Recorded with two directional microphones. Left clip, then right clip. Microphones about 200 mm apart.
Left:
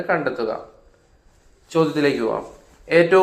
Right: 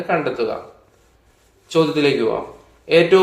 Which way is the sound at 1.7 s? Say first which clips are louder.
Right 3 dB; 15° left (ahead or behind).